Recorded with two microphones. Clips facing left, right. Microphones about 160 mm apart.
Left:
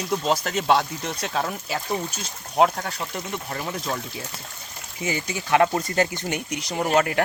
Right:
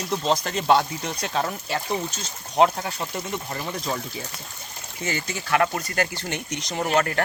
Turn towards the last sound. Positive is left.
turn(degrees=15)  # may be behind; listen again after turning